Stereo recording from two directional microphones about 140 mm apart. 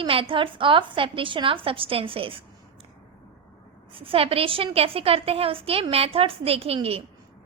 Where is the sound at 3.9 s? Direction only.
40° right (ahead or behind).